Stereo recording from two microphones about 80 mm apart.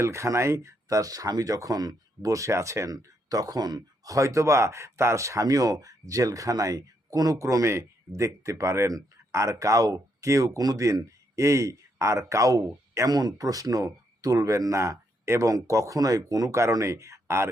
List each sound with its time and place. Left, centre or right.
0.0 s speech: right
13.1 s speech: right